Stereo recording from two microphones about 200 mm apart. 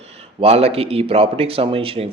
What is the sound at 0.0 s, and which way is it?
A man's voice, 30° right (ahead or behind).